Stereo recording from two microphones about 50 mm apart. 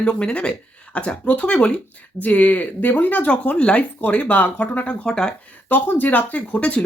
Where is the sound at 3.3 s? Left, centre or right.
Left.